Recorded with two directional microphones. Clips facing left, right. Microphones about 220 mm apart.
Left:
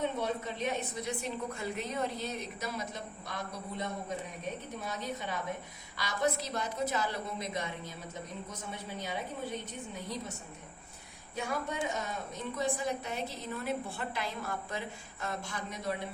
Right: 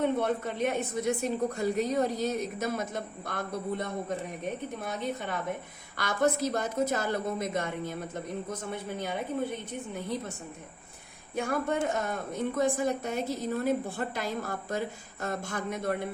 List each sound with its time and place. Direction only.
0.0 s a woman's voice: 55° right (ahead or behind)
11.3 s a woman's voice: 50° right (ahead or behind)